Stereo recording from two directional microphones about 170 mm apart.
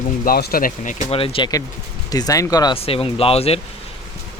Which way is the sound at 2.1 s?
20° left (ahead or behind).